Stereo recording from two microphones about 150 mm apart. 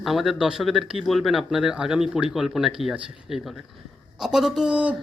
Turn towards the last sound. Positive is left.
turn(degrees=-5)  # may be behind; listen again after turning